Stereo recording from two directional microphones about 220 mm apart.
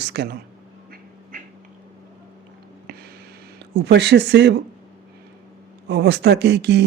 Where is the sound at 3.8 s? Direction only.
50° right (ahead or behind).